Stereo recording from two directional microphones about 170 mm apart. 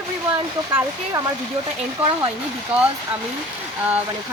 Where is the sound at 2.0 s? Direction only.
35° right (ahead or behind).